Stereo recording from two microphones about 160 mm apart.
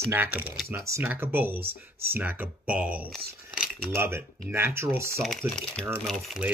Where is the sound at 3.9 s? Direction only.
15° right (ahead or behind).